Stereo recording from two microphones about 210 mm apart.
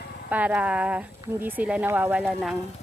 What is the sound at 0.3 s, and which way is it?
Speech, 5° right (ahead or behind).